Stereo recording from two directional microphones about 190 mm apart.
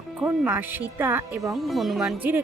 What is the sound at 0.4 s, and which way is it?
Speech, 10° right (ahead or behind).